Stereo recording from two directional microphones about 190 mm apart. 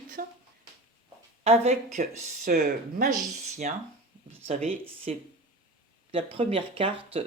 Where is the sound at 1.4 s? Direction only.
35° right (ahead or behind).